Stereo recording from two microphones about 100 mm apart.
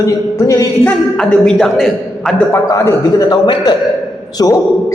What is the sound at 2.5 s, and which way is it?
Speech, 30° left (ahead or behind).